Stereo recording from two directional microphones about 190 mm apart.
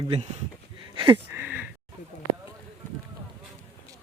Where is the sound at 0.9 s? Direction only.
25° right (ahead or behind).